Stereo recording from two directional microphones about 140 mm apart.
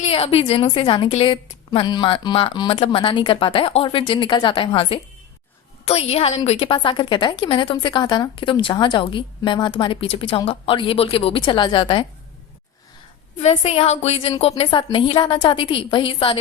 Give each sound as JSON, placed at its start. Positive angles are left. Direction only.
{"t": 0.0, "sound": "a woman's voice", "side_deg": 45}
{"t": 13.6, "sound": "a woman's voice", "side_deg": 50}